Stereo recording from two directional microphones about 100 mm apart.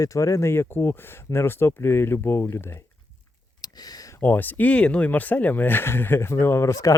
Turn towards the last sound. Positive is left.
turn(degrees=30)  # may be behind; listen again after turning